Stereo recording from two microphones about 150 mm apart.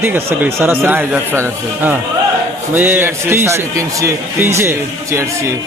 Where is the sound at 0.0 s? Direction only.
15° right (ahead or behind).